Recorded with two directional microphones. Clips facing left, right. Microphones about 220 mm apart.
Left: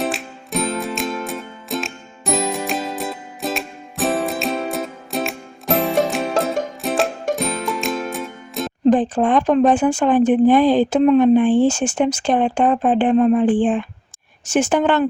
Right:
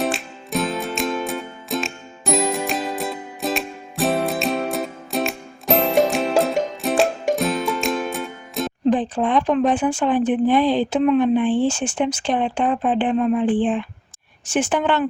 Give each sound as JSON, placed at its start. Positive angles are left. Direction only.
{"t": 0.0, "sound": "music", "side_deg": 0}
{"t": 8.9, "sound": "speech", "side_deg": 45}